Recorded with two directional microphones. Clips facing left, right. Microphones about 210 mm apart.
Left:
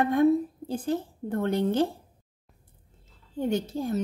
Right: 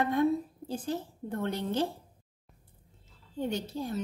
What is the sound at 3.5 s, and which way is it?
Speech, 50° left (ahead or behind).